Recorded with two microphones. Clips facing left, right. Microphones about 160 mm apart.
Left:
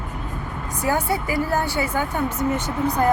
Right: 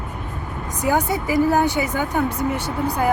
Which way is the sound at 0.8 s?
20° right (ahead or behind).